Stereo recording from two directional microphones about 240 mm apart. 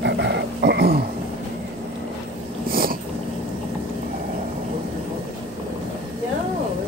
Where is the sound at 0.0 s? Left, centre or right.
Right.